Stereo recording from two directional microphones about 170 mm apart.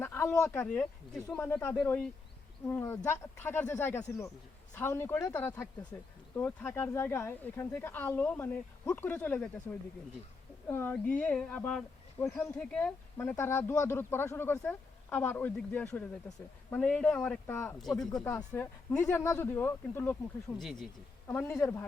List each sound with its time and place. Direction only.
0.0 s speech: 15° left (ahead or behind)
10.7 s speech: 10° left (ahead or behind)
18.2 s speech: 20° left (ahead or behind)
20.6 s speech: centre (ahead or behind)